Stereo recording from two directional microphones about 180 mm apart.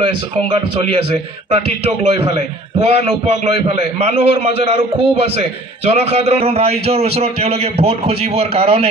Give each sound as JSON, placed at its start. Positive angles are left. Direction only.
{"t": 0.0, "sound": "a man's voice", "side_deg": -30}
{"t": 2.0, "sound": "a man's voice", "side_deg": -30}